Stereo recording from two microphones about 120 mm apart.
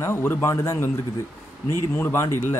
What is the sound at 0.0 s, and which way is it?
Speech, 20° left (ahead or behind).